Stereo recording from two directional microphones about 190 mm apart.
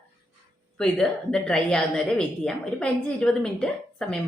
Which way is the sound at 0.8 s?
5° left (ahead or behind).